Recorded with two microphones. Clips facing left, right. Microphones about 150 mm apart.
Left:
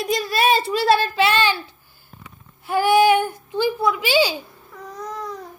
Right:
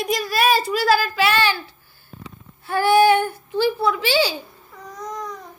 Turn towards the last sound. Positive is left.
turn(degrees=15)  # may be behind; listen again after turning